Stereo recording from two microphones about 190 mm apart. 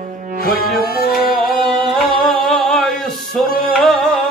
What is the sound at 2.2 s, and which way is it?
Music, 5° left (ahead or behind).